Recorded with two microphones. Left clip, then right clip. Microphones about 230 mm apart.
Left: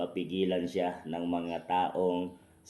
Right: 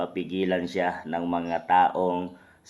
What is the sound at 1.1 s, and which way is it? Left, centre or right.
Speech, right.